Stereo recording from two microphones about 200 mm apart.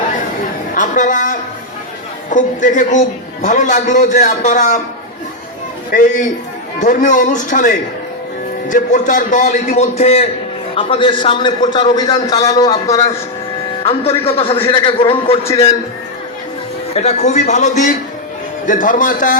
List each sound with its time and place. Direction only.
0.7 s a woman's voice: 40° left (ahead or behind)
6.7 s a man's voice: 40° left (ahead or behind); by 13.0 s 15° left (ahead or behind)
13.8 s a man's voice: 30° left (ahead or behind)
16.9 s a man's voice: 35° left (ahead or behind)